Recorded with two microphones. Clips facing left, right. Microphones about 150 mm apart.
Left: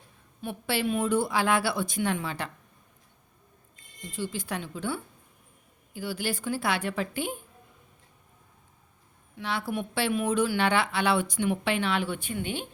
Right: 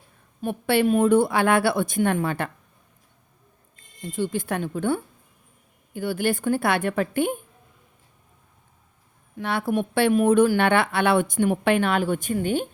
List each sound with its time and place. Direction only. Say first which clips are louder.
0.4 s speech: right 8 dB; 55° right (ahead or behind)
4.0 s speech: right 8 dB; 55° right (ahead or behind)
9.4 s speech: right 7 dB; 55° right (ahead or behind)